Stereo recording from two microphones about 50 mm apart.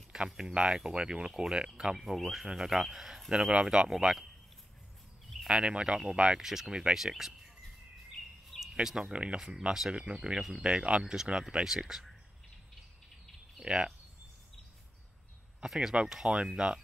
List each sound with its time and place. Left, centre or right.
0.1 s speech: centre
5.5 s speech: centre
6.7 s speech: centre
7.0 s speech: centre
8.7 s speech: centre
13.7 s speech: centre
15.6 s speech: centre